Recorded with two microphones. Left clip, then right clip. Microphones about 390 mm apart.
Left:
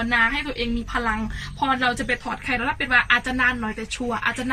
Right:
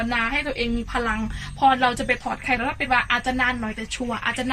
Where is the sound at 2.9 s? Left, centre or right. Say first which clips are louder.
Left 2 dB; centre.